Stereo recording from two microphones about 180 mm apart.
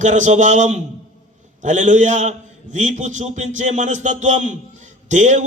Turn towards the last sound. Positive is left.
turn(degrees=-40)  # may be behind; listen again after turning